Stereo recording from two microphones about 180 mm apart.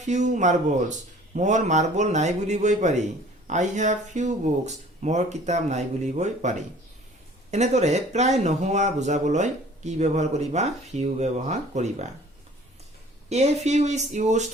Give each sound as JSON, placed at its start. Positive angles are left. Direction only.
{"t": 0.0, "sound": "a man's voice", "side_deg": -40}
{"t": 13.3, "sound": "a man's voice", "side_deg": -40}